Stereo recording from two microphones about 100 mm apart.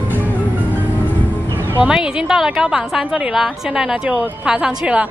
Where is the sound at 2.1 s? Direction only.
5° right (ahead or behind).